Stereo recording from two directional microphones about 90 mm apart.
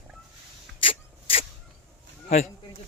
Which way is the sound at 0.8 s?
90° left.